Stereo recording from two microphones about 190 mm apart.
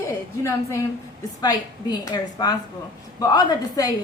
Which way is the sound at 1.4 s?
20° left (ahead or behind).